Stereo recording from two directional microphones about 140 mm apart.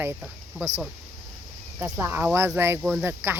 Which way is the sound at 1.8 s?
15° right (ahead or behind).